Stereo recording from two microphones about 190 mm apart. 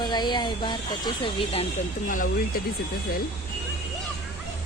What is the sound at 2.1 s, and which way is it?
Speech, 45° left (ahead or behind).